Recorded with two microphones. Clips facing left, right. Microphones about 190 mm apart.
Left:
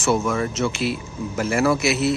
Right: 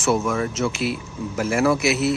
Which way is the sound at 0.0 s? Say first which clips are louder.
Even; centre (ahead or behind).